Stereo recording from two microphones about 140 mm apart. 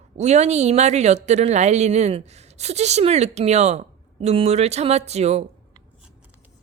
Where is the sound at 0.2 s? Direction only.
55° right (ahead or behind).